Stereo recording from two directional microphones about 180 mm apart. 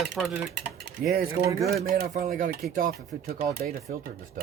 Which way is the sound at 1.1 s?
60° right (ahead or behind).